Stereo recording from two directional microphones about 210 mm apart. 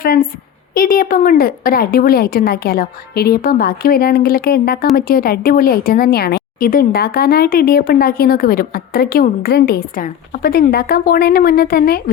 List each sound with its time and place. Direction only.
0.0 s a woman's voice: 45° left (ahead or behind)